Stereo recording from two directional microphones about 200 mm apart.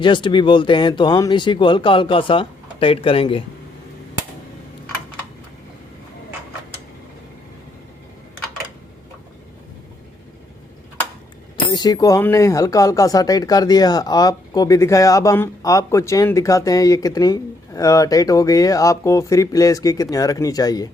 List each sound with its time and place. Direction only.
0.0 s speech: 25° left (ahead or behind)
11.5 s speech: 20° left (ahead or behind)